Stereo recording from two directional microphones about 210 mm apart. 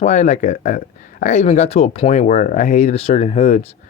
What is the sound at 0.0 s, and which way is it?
Speech, 35° left (ahead or behind).